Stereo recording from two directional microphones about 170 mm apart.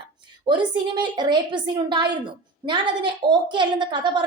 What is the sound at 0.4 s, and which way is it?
A woman's voice, 25° right (ahead or behind).